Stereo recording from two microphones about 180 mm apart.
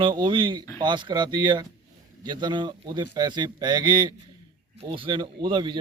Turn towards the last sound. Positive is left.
turn(degrees=-25)  # may be behind; listen again after turning